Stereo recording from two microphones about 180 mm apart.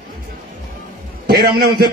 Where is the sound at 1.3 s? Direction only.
60° right (ahead or behind).